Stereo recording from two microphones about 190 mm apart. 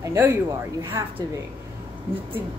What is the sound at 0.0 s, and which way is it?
A woman's voice, 15° right (ahead or behind).